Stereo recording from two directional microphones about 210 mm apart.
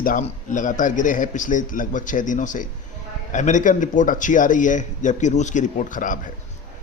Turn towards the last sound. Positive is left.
turn(degrees=40)  # may be behind; listen again after turning